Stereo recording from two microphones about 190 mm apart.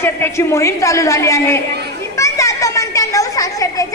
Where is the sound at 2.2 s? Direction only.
15° left (ahead or behind).